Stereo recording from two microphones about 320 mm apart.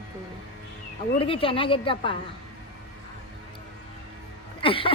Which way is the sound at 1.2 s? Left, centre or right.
Centre.